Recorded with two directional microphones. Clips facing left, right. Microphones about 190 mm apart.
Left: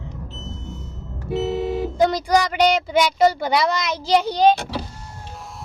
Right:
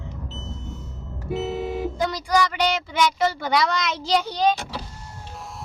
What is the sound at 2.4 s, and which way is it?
Speech, 15° left (ahead or behind).